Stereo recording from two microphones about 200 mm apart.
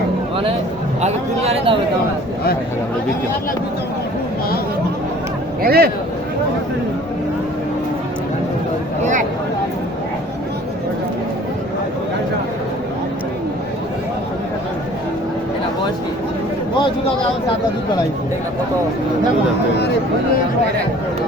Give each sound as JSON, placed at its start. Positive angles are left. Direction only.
{"t": 1.0, "sound": "speech", "side_deg": -30}
{"t": 5.6, "sound": "a man's voice", "side_deg": -50}